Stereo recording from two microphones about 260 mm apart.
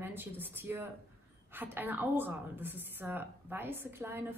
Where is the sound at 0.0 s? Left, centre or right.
Centre.